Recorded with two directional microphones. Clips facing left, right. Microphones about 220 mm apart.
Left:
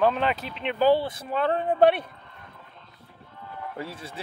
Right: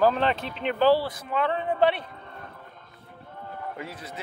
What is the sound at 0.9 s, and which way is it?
Speech, 25° left (ahead or behind).